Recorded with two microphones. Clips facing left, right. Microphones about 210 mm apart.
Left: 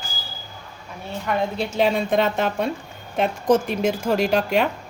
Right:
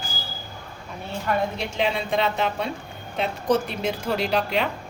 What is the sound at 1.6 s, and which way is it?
Speech, 40° left (ahead or behind).